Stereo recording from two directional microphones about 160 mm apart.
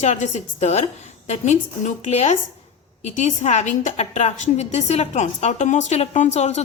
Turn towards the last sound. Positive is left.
turn(degrees=45)  # may be behind; listen again after turning